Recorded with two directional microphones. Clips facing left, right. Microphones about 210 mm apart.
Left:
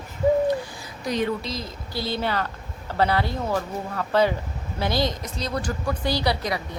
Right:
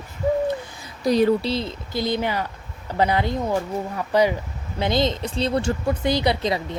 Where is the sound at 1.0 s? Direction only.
35° right (ahead or behind).